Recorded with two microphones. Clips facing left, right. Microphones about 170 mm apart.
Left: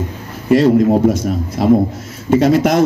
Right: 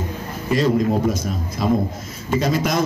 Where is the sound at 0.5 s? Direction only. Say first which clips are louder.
Left 8 dB; 65° left (ahead or behind).